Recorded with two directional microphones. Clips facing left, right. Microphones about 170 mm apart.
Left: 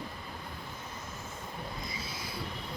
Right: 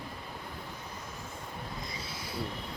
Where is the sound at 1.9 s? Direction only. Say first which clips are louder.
Even; 90° left.